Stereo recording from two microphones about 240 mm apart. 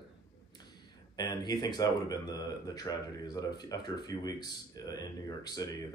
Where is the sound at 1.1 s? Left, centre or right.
Centre.